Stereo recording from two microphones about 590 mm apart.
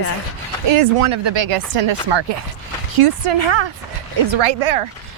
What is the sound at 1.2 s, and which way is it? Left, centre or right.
Speech, right.